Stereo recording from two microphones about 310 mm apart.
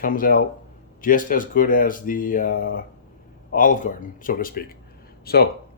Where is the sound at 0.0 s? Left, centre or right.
Left.